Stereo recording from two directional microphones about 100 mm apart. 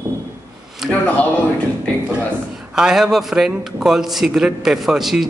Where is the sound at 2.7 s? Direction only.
5° right (ahead or behind).